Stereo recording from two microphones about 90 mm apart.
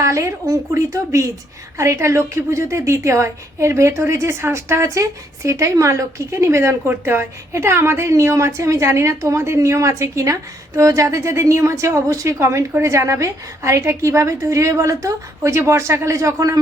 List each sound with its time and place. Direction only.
0.0 s a woman's voice: 35° right (ahead or behind)